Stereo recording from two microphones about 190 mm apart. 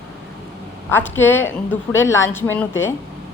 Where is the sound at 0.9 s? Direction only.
10° left (ahead or behind).